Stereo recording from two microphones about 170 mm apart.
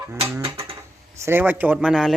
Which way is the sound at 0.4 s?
35° right (ahead or behind).